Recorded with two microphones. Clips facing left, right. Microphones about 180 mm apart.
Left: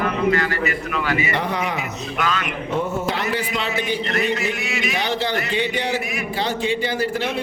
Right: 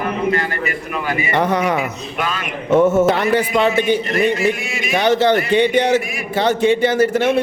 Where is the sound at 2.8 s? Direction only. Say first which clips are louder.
Right 11 dB; 85° right.